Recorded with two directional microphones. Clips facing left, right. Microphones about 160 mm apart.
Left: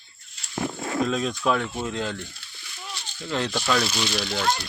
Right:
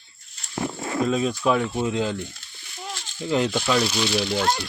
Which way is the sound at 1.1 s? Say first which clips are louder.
Right 5 dB; 5° right (ahead or behind).